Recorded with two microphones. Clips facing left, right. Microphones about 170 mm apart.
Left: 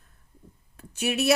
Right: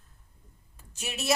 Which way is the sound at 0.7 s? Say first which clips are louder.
Left 11 dB; 60° left (ahead or behind).